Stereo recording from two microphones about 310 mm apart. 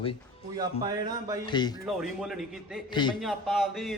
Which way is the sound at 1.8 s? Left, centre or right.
Centre.